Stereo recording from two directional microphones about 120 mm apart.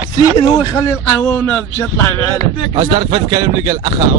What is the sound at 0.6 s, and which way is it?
A man's voice, 25° left (ahead or behind).